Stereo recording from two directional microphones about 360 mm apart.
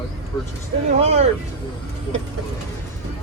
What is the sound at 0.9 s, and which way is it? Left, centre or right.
Speech, centre.